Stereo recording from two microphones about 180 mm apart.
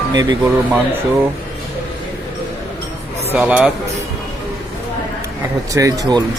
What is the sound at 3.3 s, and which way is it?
Speech, 5° right (ahead or behind).